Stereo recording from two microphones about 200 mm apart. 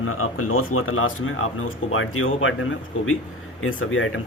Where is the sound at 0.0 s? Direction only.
90° left.